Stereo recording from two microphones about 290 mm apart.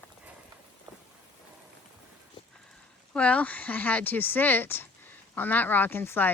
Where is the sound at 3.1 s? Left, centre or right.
Centre.